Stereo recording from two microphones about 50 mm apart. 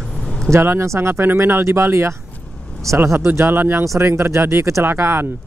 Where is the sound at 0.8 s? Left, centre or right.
Right.